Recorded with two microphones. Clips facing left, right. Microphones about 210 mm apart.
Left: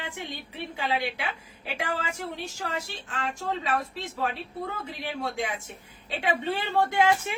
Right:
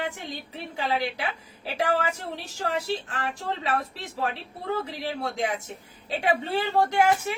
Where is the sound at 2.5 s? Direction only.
35° right (ahead or behind).